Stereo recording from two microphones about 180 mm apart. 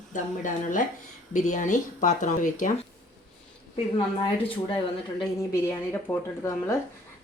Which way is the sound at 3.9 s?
25° left (ahead or behind).